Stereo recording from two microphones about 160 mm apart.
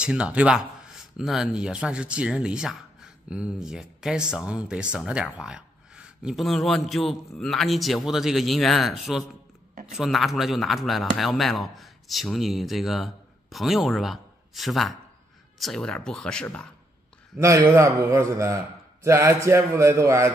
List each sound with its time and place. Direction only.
0.0 s speech: 5° right (ahead or behind)
17.6 s a man's voice: 20° right (ahead or behind)